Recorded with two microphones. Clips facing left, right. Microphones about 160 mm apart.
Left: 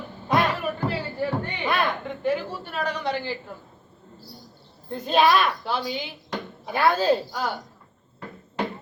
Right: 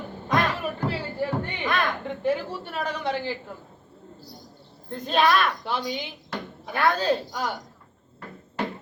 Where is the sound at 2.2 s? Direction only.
Centre (ahead or behind).